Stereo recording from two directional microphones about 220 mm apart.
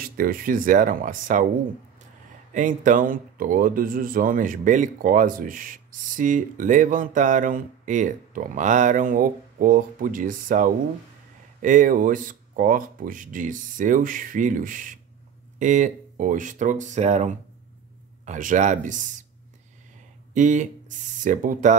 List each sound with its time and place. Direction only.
0.0 s speech: 40° right (ahead or behind)
2.5 s speech: 35° right (ahead or behind)
20.3 s speech: 35° right (ahead or behind)